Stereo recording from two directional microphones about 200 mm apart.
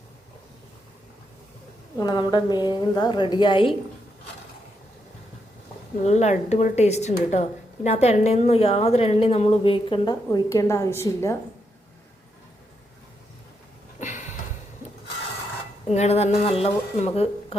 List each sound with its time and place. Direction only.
2.0 s a woman's voice: 20° left (ahead or behind)
6.0 s a woman's voice: 35° left (ahead or behind); by 11.3 s 15° left (ahead or behind)
14.0 s a sound: 35° left (ahead or behind)
15.9 s speech: 35° left (ahead or behind)